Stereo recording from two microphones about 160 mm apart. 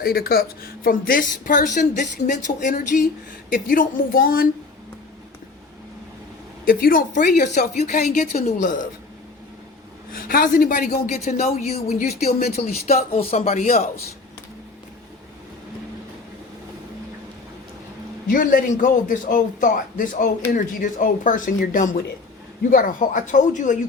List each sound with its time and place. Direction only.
0.0 s a woman's voice: 70° left (ahead or behind)
6.7 s a woman's voice: 65° left (ahead or behind)
10.1 s a man's voice: 65° left (ahead or behind); by 13.9 s 50° left (ahead or behind)
18.3 s a man's voice: 60° left (ahead or behind)